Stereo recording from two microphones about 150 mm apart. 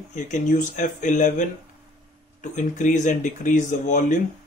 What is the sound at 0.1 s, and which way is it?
Speech, 55° left (ahead or behind).